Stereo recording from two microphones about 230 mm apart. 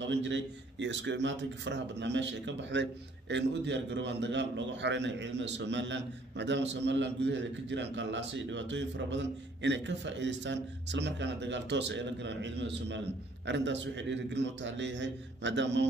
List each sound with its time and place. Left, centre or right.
0.0 s a man's voice: right